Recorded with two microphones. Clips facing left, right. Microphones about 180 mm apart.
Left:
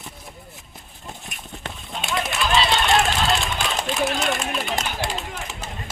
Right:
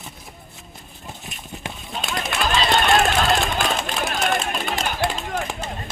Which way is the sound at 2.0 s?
45° right (ahead or behind).